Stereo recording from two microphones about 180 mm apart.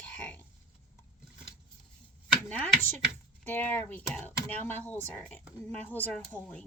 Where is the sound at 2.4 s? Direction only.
10° left (ahead or behind).